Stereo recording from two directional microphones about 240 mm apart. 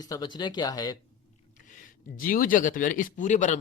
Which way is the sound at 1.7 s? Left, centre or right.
Left.